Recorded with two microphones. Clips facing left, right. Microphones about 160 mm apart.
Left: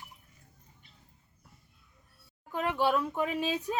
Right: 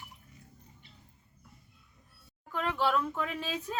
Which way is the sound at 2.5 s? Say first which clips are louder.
Left 2 dB; 15° left (ahead or behind).